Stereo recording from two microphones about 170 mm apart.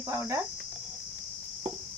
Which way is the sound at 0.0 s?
15° right (ahead or behind).